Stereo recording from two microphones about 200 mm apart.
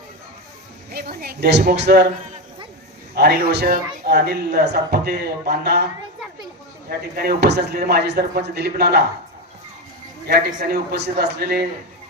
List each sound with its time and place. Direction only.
0.9 s speech: 50° right (ahead or behind)
3.2 s speech: 50° right (ahead or behind)
7.2 s speech: 50° right (ahead or behind)
10.2 s speech: 45° right (ahead or behind)